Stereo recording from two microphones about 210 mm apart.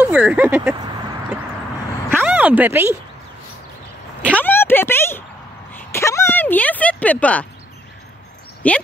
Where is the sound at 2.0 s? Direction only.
10° right (ahead or behind).